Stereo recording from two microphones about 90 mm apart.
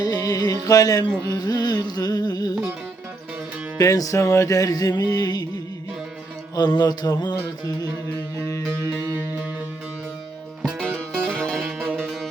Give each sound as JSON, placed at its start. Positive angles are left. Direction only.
{"t": 0.0, "sound": "music", "side_deg": 45}
{"t": 3.8, "sound": "music", "side_deg": 40}
{"t": 6.6, "sound": "music", "side_deg": 50}
{"t": 10.8, "sound": "music", "side_deg": 10}